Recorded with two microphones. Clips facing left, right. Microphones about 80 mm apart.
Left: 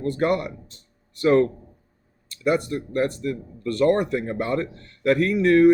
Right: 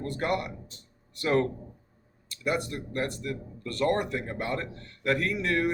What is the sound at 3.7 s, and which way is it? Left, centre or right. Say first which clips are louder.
Speech: left 7 dB; left.